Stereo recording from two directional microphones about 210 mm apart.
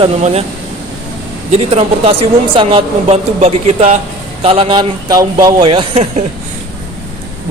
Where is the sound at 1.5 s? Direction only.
30° right (ahead or behind).